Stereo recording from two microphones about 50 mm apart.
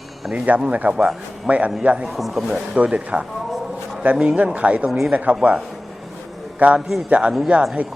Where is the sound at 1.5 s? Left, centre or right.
Centre.